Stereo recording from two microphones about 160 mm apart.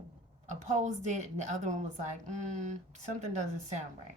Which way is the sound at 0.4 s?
50° right (ahead or behind).